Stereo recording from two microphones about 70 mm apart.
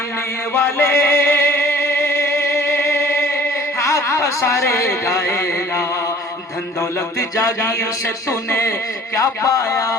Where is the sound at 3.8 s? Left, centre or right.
Left.